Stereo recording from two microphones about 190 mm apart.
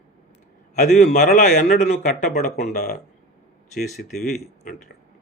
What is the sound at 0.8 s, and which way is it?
A man's voice, 50° left (ahead or behind).